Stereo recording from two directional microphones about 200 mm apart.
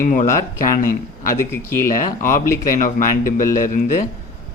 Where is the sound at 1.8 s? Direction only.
40° left (ahead or behind).